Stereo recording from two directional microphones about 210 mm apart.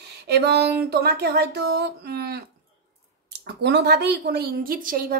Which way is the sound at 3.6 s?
50° right (ahead or behind).